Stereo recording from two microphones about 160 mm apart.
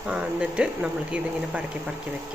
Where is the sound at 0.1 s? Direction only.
5° right (ahead or behind).